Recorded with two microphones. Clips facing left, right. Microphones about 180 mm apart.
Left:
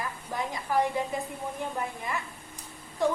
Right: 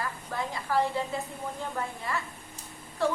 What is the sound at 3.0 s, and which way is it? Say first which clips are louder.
Speech: left 1 dB; 15° left (ahead or behind).